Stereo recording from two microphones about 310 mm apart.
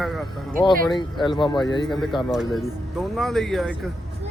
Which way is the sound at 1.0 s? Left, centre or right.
Centre.